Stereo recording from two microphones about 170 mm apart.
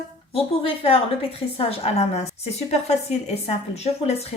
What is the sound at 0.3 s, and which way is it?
A woman's voice, 35° left (ahead or behind).